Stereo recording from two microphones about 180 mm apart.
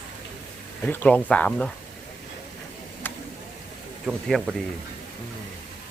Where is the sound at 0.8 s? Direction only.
10° left (ahead or behind).